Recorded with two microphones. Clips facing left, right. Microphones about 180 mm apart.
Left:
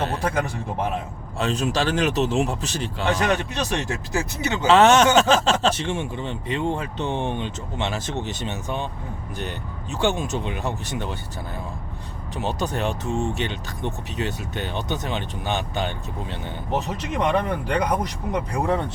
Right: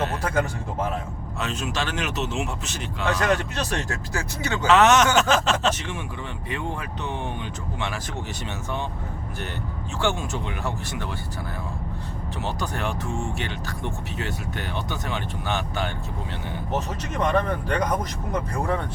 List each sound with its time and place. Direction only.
0.0 s a sound: 30° left (ahead or behind)
1.4 s speech: 35° left (ahead or behind)
3.2 s speech: 20° left (ahead or behind)
10.0 s speech: 20° left (ahead or behind)
12.4 s speech: 20° left (ahead or behind)